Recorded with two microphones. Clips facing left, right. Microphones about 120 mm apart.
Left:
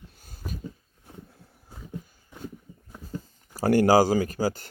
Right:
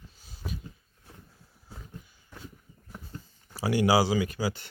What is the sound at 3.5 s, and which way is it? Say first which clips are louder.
Speech: left 5 dB; 45° left (ahead or behind).